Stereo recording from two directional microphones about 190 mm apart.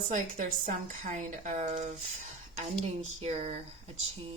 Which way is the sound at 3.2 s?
30° right (ahead or behind).